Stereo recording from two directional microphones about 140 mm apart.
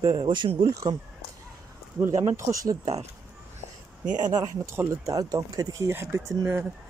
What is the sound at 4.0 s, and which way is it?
Speech, 65° right (ahead or behind).